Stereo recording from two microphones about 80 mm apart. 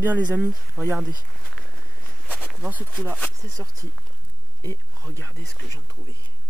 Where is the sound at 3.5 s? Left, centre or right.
Right.